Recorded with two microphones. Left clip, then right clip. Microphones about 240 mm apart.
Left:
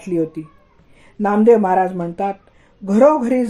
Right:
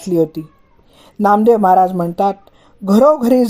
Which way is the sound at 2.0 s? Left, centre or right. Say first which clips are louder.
Right 6 dB; right.